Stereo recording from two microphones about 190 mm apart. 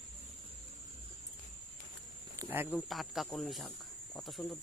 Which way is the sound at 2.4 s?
10° right (ahead or behind).